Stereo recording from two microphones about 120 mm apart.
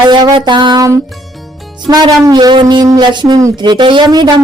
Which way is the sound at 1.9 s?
35° right (ahead or behind).